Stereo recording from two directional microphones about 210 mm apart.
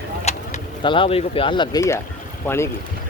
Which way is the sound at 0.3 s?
25° left (ahead or behind).